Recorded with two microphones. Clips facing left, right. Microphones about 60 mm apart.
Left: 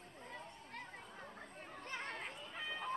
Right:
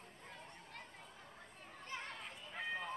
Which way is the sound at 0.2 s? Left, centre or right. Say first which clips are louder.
Left 5 dB; left.